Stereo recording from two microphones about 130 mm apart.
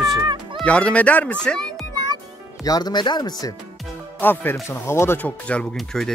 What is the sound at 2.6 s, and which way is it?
Speech, 30° left (ahead or behind).